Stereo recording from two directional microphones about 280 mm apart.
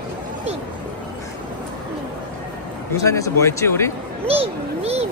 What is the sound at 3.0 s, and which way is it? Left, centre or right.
Speech, centre.